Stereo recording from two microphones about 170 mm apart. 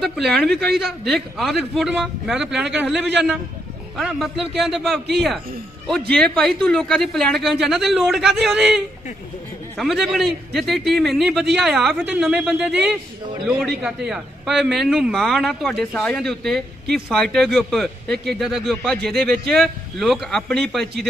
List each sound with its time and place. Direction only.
0.0 s a man's voice: centre (ahead or behind)